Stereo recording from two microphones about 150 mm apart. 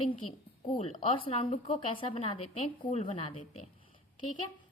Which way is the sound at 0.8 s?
40° left (ahead or behind).